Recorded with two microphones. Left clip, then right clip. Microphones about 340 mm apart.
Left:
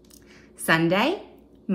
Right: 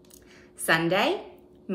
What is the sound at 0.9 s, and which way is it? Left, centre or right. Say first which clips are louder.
Speech: left 1 dB; centre.